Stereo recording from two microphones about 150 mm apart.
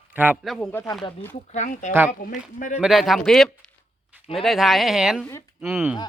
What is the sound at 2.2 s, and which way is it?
Speech, 70° left (ahead or behind).